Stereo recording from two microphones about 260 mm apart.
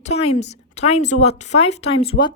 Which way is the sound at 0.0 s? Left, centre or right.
Left.